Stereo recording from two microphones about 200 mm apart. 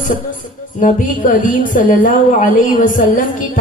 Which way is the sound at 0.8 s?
40° left (ahead or behind).